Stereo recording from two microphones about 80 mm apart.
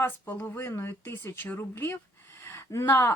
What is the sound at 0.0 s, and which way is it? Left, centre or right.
Speech, left.